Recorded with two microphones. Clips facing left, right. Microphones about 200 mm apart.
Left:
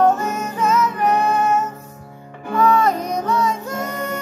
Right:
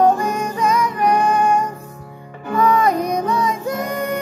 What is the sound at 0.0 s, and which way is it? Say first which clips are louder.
Music: right 1 dB; 15° right (ahead or behind).